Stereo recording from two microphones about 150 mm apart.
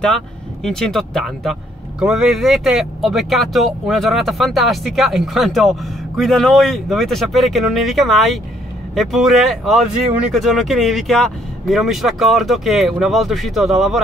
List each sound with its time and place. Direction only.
0.7 s speech: 5° left (ahead or behind)